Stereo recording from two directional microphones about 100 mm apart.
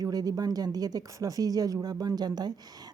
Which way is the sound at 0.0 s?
40° right (ahead or behind).